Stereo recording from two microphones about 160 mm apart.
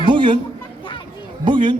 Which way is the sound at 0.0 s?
30° right (ahead or behind).